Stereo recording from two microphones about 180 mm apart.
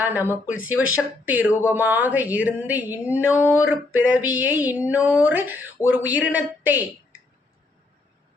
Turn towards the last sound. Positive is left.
turn(degrees=-10)  # may be behind; listen again after turning